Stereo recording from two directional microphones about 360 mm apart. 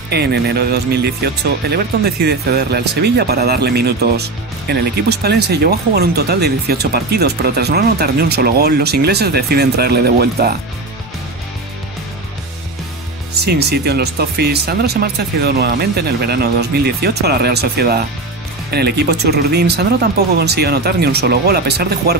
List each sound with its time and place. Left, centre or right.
0.1 s speech: right
13.5 s speech: right